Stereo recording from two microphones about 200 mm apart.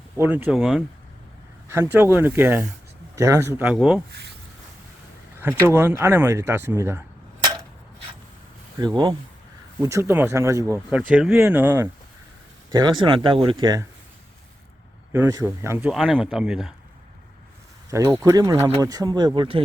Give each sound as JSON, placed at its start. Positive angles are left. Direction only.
{"t": 0.2, "sound": "speech", "side_deg": -10}
{"t": 1.6, "sound": "speech", "side_deg": -10}
{"t": 5.6, "sound": "speech", "side_deg": -10}
{"t": 7.4, "sound": "a sound", "side_deg": -25}
{"t": 9.8, "sound": "speech", "side_deg": -15}
{"t": 12.7, "sound": "speech", "side_deg": -20}
{"t": 15.1, "sound": "speech", "side_deg": -15}
{"t": 15.9, "sound": "speech", "side_deg": 0}
{"t": 17.9, "sound": "speech", "side_deg": -15}